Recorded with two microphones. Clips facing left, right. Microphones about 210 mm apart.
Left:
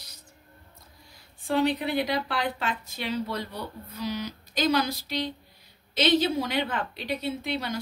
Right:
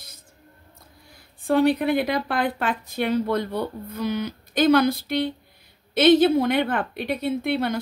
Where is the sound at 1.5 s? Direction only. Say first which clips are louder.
Right 6 dB; 55° right (ahead or behind).